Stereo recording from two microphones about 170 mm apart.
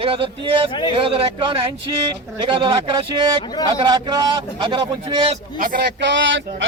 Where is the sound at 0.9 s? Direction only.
30° right (ahead or behind).